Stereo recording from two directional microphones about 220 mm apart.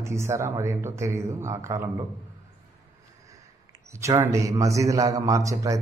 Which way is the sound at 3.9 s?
15° right (ahead or behind).